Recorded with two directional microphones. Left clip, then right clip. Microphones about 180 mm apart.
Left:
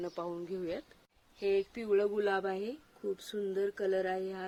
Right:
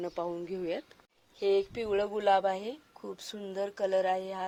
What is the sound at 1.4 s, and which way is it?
Speech, 15° right (ahead or behind).